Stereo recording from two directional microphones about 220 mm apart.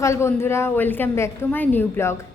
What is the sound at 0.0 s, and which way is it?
A woman's voice, 10° left (ahead or behind).